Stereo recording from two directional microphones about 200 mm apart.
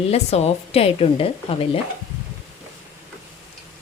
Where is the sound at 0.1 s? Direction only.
30° left (ahead or behind).